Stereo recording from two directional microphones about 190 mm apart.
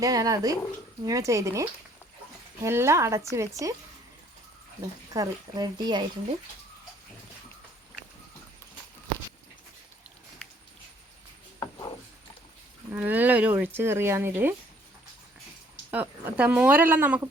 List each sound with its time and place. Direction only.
0.0 s speech: 20° right (ahead or behind)
2.6 s speech: 15° right (ahead or behind)
4.8 s speech: 20° right (ahead or behind)
12.9 s speech: 10° right (ahead or behind)
15.9 s speech: 5° right (ahead or behind)